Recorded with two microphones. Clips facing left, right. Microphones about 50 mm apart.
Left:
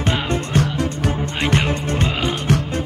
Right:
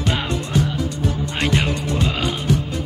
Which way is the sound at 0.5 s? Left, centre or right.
Left.